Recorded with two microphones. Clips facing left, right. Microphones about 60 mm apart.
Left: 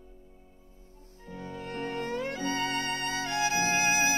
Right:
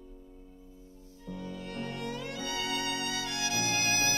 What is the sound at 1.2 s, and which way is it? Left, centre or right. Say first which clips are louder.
Music: left 1 dB; left.